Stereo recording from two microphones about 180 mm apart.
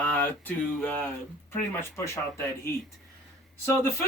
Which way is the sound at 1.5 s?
10° left (ahead or behind).